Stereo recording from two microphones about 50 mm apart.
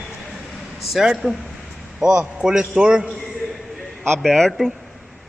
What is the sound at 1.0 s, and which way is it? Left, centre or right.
A man's voice, centre.